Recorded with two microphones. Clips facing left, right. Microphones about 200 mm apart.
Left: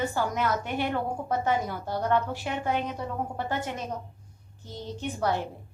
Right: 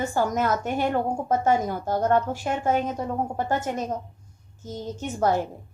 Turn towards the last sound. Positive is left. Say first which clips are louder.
# right 5 dB
turn(degrees=-45)  # may be behind; listen again after turning